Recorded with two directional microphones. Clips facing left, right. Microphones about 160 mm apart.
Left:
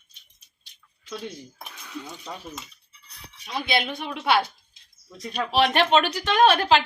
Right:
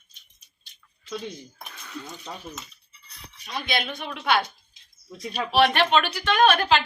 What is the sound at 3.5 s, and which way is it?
Speech, 5° left (ahead or behind).